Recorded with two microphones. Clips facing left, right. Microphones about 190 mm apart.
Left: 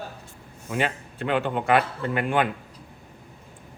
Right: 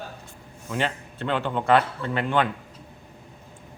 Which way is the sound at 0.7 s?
10° left (ahead or behind).